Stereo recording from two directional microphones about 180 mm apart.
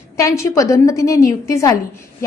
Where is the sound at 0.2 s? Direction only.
15° left (ahead or behind).